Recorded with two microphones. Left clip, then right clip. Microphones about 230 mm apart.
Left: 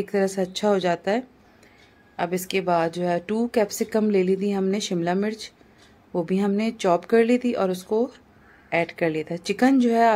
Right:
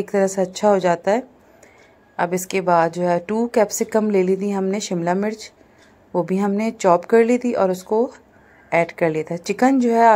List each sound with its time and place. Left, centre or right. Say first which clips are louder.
0.0 s a woman's voice: right 5 dB; centre